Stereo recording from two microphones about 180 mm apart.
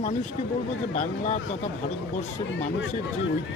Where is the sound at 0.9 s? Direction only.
40° left (ahead or behind).